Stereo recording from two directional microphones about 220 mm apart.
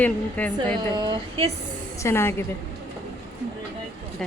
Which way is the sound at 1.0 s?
20° right (ahead or behind).